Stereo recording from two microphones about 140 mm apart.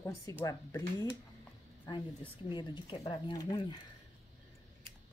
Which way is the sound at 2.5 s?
35° left (ahead or behind).